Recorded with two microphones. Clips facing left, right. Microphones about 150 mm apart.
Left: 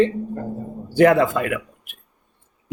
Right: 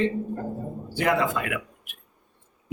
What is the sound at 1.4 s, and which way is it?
Speech, 45° left (ahead or behind).